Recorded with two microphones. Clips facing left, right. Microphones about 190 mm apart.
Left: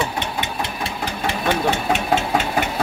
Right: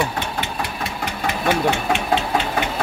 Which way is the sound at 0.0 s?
20° left (ahead or behind).